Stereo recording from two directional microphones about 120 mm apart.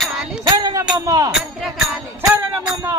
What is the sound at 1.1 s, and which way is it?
Speech, 30° right (ahead or behind).